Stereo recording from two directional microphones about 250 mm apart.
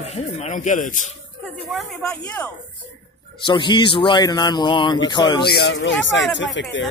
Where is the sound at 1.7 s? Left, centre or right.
Centre.